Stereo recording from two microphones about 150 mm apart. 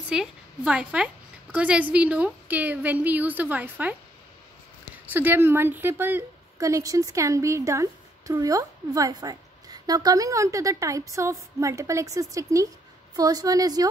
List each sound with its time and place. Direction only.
0.1 s a woman's voice: 5° right (ahead or behind)
4.9 s a woman's voice: 10° right (ahead or behind)